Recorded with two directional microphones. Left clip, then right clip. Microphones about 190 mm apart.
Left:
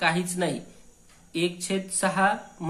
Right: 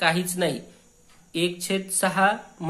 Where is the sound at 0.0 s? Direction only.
20° right (ahead or behind).